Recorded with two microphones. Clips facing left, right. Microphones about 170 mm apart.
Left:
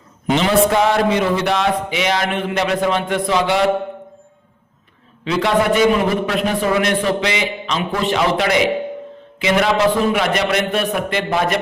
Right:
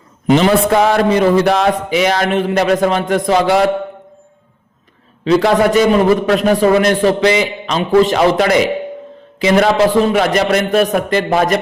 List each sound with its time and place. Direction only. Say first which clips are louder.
0.3 s speech: right 4 dB; 45° right (ahead or behind)
5.2 s a man's voice: right 6 dB; 40° right (ahead or behind)